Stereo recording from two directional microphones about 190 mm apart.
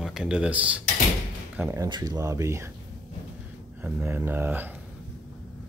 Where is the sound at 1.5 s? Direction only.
15° right (ahead or behind).